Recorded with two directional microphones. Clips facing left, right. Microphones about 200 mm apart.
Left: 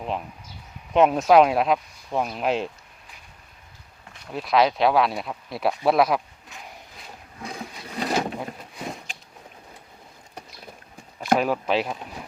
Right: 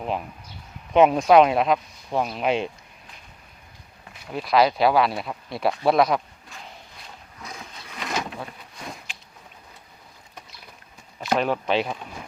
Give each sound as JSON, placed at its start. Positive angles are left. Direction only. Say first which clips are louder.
{"t": 0.0, "sound": "speech", "louder": "right 1 dB", "side_deg": -5}
{"t": 4.1, "sound": "speech", "louder": "right 1 dB", "side_deg": 0}
{"t": 7.4, "sound": "a sound", "louder": "left 5 dB", "side_deg": 35}
{"t": 11.3, "sound": "speech", "louder": "right 3 dB", "side_deg": 5}